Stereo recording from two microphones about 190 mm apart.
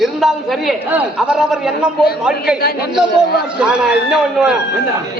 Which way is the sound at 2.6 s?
55° left (ahead or behind).